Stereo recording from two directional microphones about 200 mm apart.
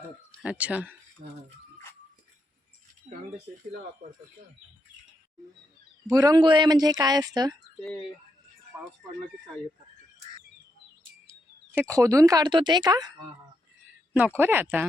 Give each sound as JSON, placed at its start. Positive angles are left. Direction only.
{"t": 0.4, "sound": "speech", "side_deg": -5}
{"t": 6.1, "sound": "a woman's voice", "side_deg": -20}
{"t": 11.7, "sound": "speech", "side_deg": -15}
{"t": 14.3, "sound": "speech", "side_deg": -10}